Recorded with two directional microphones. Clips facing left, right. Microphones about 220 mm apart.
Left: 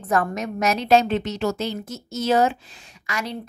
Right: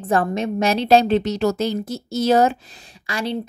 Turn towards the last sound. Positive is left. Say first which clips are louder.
# right 4 dB
turn(degrees=-30)  # may be behind; listen again after turning